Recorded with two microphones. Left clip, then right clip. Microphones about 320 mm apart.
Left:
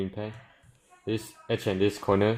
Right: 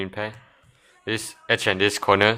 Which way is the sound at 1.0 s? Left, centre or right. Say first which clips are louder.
Right 7 dB; right.